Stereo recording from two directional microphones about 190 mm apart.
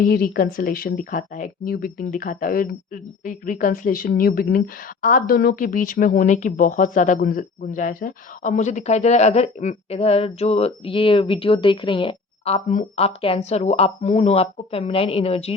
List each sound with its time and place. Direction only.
0.0 s speech: 50° left (ahead or behind); by 15.5 s 30° left (ahead or behind)